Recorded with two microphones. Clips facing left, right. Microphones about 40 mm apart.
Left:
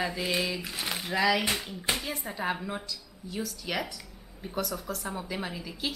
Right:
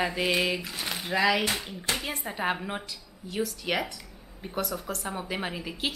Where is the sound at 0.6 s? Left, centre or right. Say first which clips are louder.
Even; centre.